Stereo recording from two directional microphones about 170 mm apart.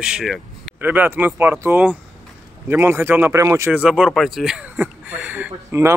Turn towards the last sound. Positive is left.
turn(degrees=-15)  # may be behind; listen again after turning